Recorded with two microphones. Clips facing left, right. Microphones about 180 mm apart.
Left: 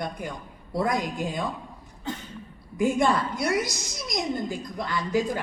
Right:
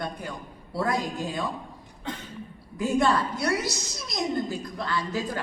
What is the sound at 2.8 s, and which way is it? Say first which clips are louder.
A woman's voice: left 1 dB; 15° left (ahead or behind).